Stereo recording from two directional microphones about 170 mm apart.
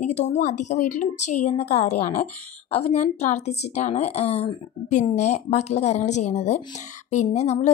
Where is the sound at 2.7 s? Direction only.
40° left (ahead or behind).